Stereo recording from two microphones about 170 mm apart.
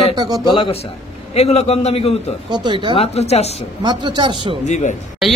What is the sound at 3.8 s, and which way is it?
Speech, 25° right (ahead or behind).